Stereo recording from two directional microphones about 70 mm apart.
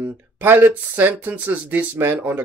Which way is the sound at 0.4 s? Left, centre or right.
Right.